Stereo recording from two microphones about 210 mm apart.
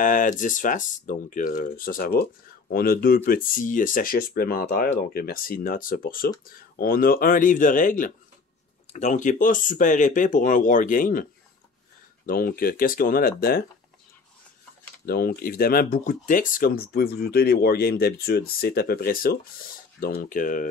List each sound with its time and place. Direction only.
0.0 s speech: 40° left (ahead or behind)
12.3 s speech: 45° left (ahead or behind)
15.0 s speech: 45° left (ahead or behind)